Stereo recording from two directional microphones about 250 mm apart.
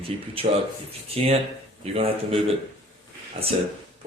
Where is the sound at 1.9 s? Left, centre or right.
Right.